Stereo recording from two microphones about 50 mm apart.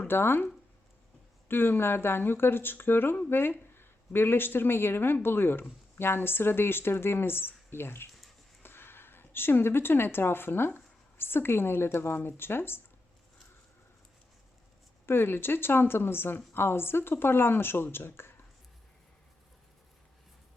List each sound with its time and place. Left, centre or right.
0.1 s speech: left
1.5 s a woman's voice: left
15.0 s speech: left